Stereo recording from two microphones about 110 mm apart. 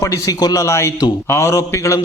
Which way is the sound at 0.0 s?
30° left (ahead or behind).